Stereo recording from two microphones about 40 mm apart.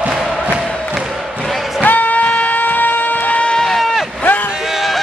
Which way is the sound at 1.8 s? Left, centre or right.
Left.